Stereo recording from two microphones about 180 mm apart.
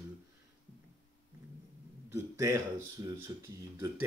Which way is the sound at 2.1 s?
15° right (ahead or behind).